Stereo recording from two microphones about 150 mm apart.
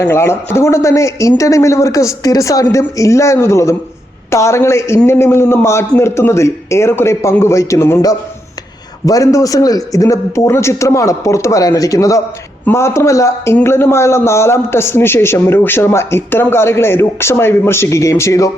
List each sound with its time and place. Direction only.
0.0 s a man's voice: 15° left (ahead or behind)